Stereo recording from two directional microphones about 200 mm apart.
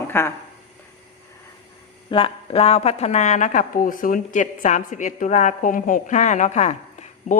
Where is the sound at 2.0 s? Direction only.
25° left (ahead or behind).